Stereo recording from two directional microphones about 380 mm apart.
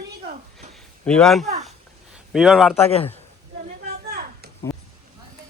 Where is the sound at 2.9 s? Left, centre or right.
Centre.